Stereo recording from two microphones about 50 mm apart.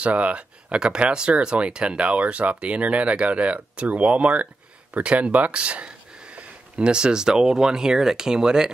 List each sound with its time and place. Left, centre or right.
0.0 s speech: right